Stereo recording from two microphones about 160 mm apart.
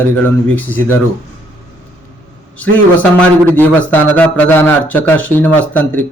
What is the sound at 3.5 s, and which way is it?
A man's voice, 10° left (ahead or behind).